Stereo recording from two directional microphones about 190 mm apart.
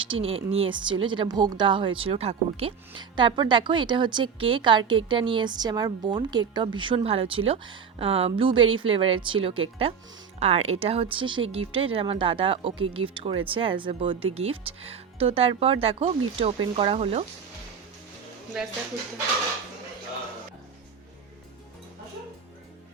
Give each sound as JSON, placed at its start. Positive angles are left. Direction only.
{"t": 0.0, "sound": "speech", "side_deg": -30}